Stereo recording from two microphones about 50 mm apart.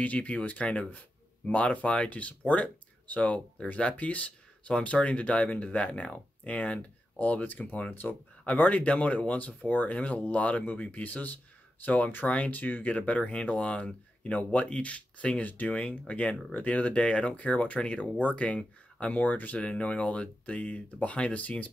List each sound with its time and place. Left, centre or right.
0.0 s speech: left
7.9 s speech: left
8.5 s speech: left
19.2 s speech: left